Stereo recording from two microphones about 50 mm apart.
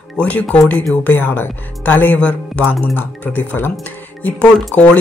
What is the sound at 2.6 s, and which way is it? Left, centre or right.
Speech, left.